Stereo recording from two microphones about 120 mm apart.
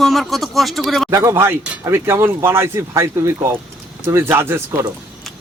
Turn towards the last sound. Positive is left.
turn(degrees=-25)  # may be behind; listen again after turning